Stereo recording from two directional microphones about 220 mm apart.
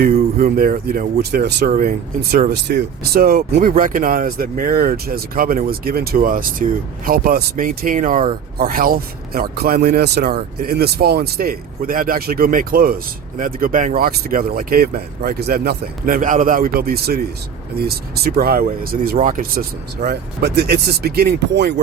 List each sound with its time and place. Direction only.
0.0 s speech: 40° right (ahead or behind)